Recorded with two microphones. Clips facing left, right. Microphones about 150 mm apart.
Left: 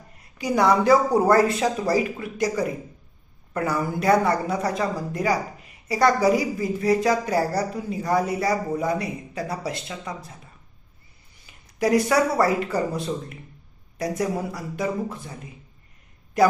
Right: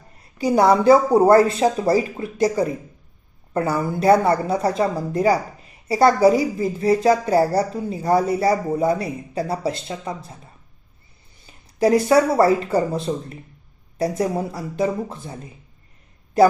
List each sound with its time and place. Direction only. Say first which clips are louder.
0.3 s a woman's voice: right 4 dB; 30° right (ahead or behind)
11.4 s a woman's voice: right 5 dB; 30° right (ahead or behind)